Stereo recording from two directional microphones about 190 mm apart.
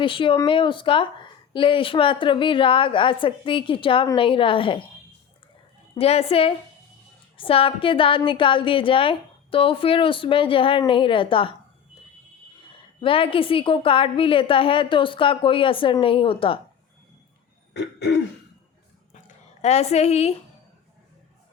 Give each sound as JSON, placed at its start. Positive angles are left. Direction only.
{"t": 0.0, "sound": "a woman's voice", "side_deg": 25}
{"t": 5.9, "sound": "a woman's voice", "side_deg": 30}
{"t": 13.0, "sound": "a woman's voice", "side_deg": 30}
{"t": 17.7, "sound": "throat clearing", "side_deg": 60}
{"t": 19.6, "sound": "a woman's voice", "side_deg": 35}